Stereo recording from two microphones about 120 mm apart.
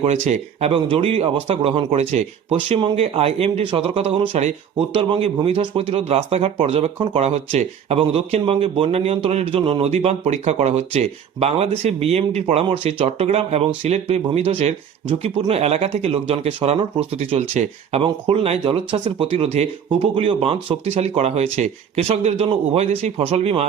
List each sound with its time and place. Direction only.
0.0 s a man's voice: 65° right (ahead or behind)
0.7 s a man's voice: 50° right (ahead or behind)
2.6 s a man's voice: 45° right (ahead or behind); by 12.6 s 60° right (ahead or behind)
12.6 s a man's voice: 45° right (ahead or behind)